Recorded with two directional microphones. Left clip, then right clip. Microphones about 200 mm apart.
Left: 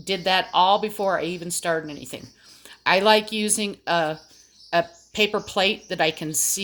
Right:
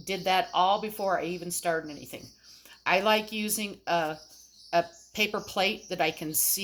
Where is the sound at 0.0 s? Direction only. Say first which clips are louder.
Left 5 dB; 30° left (ahead or behind).